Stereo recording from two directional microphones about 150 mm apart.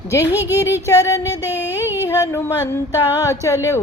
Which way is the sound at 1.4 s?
15° right (ahead or behind).